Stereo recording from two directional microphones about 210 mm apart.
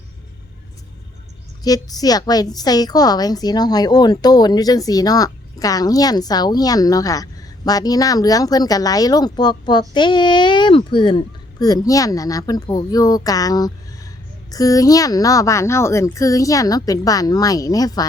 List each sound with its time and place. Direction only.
1.6 s a woman's voice: 15° left (ahead or behind)